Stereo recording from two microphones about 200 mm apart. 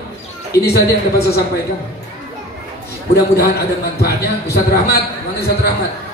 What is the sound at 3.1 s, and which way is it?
A man's voice, 55° left (ahead or behind).